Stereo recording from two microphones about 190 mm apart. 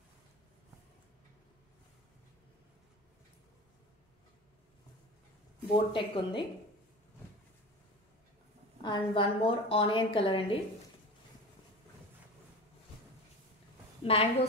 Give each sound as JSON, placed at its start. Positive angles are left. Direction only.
{"t": 5.7, "sound": "a woman's voice", "side_deg": 25}
{"t": 8.8, "sound": "a woman's voice", "side_deg": 25}
{"t": 14.0, "sound": "a woman's voice", "side_deg": 30}